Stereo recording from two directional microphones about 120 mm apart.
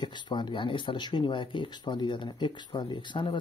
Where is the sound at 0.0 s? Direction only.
40° left (ahead or behind).